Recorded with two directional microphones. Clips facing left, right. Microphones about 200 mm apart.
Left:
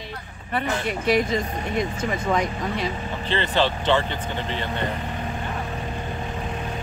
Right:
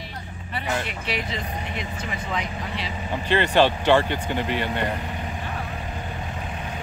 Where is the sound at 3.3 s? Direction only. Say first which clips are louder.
Right 4 dB; 15° right (ahead or behind).